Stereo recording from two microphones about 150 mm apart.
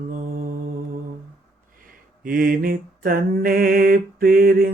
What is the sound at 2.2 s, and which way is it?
Mantra, 70° right (ahead or behind).